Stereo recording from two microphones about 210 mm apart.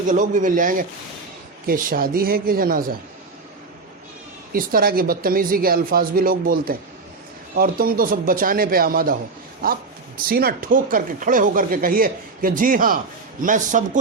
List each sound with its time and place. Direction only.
0.1 s speech: 40° right (ahead or behind)
4.5 s speech: 45° right (ahead or behind)